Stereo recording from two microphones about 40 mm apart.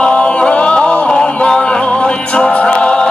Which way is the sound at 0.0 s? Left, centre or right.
Left.